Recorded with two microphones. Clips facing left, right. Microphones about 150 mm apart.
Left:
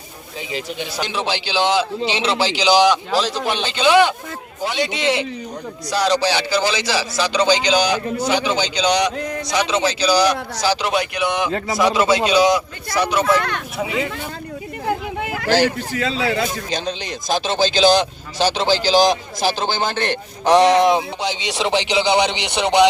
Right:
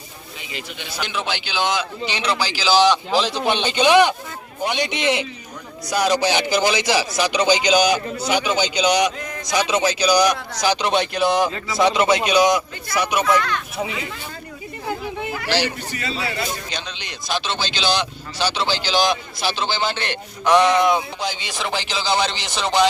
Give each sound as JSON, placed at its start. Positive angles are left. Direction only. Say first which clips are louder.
{"t": 0.5, "sound": "a man's voice", "louder": "left 6 dB", "side_deg": 35}
{"t": 3.1, "sound": "a man's voice", "louder": "even", "side_deg": 0}
{"t": 3.7, "sound": "speech", "louder": "left 1 dB", "side_deg": -15}
{"t": 11.8, "sound": "speech", "louder": "even", "side_deg": -20}
{"t": 15.2, "sound": "a sound", "louder": "left 2 dB", "side_deg": 75}
{"t": 15.4, "sound": "speech", "louder": "left 6 dB", "side_deg": 50}
{"t": 15.9, "sound": "speech", "louder": "left 6 dB", "side_deg": 90}
{"t": 16.7, "sound": "speech", "louder": "left 8 dB", "side_deg": 45}
{"t": 21.2, "sound": "speech", "louder": "left 4 dB", "side_deg": 75}
{"t": 21.6, "sound": "a man's voice", "louder": "left 7 dB", "side_deg": 20}
{"t": 22.4, "sound": "a man's voice", "louder": "left 5 dB", "side_deg": 65}